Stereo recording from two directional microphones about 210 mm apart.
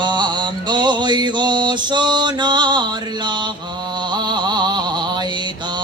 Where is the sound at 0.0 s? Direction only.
20° right (ahead or behind).